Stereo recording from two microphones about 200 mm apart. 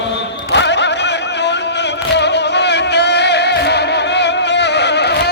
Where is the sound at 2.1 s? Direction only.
60° left (ahead or behind).